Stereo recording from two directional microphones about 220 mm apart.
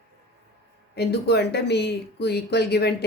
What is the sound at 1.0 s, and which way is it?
A woman's voice, 50° left (ahead or behind).